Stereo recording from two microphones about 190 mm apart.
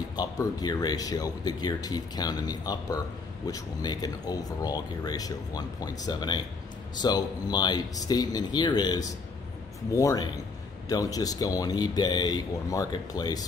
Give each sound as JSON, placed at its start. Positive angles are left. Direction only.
{"t": 0.1, "sound": "speech", "side_deg": 20}